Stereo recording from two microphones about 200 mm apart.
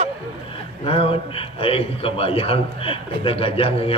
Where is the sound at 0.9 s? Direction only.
30° left (ahead or behind).